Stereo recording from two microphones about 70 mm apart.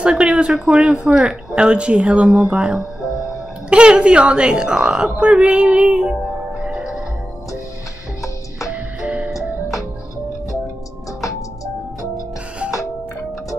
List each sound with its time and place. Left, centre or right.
0.0 s speech: centre
6.6 s music: centre
8.2 s music: left
9.0 s music: centre
11.1 s music: left